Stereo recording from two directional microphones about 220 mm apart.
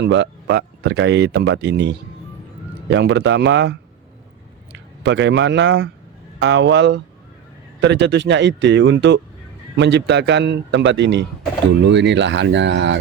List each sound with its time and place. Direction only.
0.0 s speech: 50° right (ahead or behind)